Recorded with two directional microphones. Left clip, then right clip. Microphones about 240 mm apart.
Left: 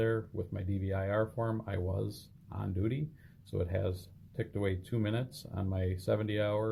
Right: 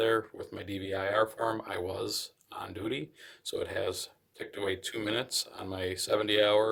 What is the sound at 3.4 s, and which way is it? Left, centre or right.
Speech, right.